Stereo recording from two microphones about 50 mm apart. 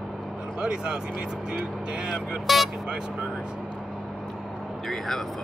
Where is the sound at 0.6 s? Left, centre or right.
Centre.